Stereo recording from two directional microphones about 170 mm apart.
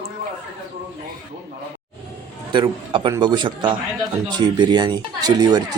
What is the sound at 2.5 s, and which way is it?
Speech, 30° right (ahead or behind).